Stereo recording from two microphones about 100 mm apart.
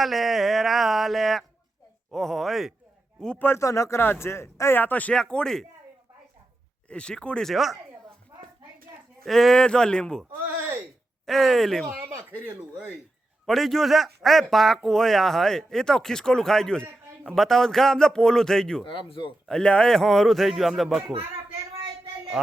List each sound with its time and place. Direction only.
0.0 s speech: centre (ahead or behind)
3.3 s speech: 25° left (ahead or behind); by 5.6 s 5° left (ahead or behind)
6.8 s a man's voice: 10° left (ahead or behind)
9.2 s a man's voice: 5° left (ahead or behind)
11.3 s speech: centre (ahead or behind)
12.4 s speech: 15° right (ahead or behind)
13.4 s speech: centre (ahead or behind)
18.9 s speech: 55° left (ahead or behind)
19.5 s speech: 10° left (ahead or behind)